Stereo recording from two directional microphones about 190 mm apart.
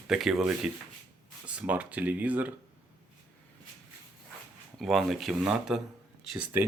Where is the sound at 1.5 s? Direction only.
5° right (ahead or behind).